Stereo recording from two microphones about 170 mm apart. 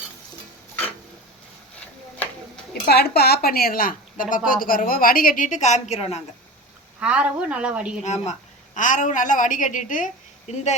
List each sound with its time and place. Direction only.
2.8 s a woman's voice: 70° left (ahead or behind); by 6.1 s 40° left (ahead or behind)
7.0 s speech: 5° right (ahead or behind)
8.0 s a woman's voice: 40° left (ahead or behind)